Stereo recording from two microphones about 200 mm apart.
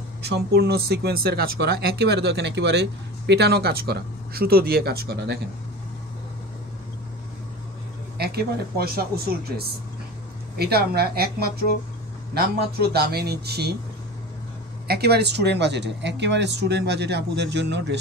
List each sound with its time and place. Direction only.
0.2 s speech: 55° right (ahead or behind)
8.2 s speech: 50° right (ahead or behind)
14.9 s speech: 55° right (ahead or behind)